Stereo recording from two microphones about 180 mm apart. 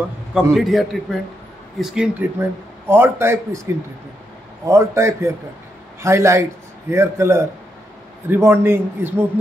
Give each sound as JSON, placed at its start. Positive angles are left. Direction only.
{"t": 0.3, "sound": "a man's voice", "side_deg": 0}